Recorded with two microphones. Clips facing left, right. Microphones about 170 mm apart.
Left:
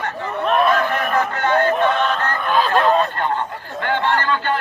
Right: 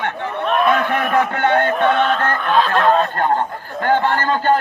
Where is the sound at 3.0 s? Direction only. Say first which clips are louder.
Right 3 dB; 45° right (ahead or behind).